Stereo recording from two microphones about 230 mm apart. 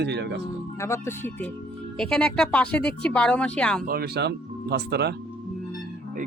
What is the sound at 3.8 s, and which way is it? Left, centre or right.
Speech, right.